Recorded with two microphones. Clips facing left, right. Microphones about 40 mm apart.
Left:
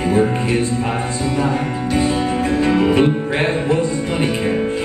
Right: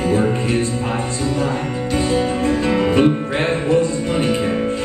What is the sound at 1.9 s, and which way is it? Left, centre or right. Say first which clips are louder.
Music: even; centre.